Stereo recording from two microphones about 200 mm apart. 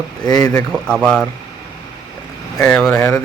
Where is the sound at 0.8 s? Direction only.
5° left (ahead or behind).